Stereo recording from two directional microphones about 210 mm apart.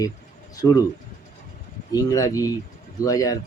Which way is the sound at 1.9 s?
15° left (ahead or behind).